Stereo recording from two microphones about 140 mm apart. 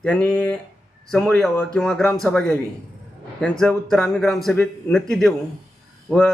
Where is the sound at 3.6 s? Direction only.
5° left (ahead or behind).